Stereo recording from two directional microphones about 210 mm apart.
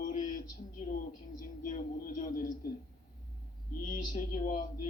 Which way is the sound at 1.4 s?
40° left (ahead or behind).